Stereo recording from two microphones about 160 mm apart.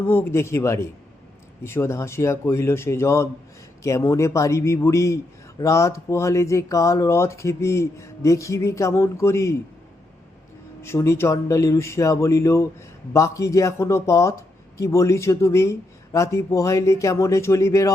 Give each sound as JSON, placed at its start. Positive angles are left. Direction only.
{"t": 0.1, "sound": "speech", "side_deg": 15}
{"t": 10.8, "sound": "speech", "side_deg": 15}